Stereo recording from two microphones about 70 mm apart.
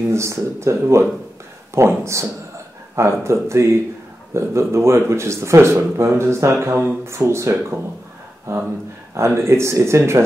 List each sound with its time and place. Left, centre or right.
0.1 s speech: right